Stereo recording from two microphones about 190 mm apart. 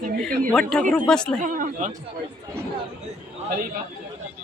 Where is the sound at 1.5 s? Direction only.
45° right (ahead or behind).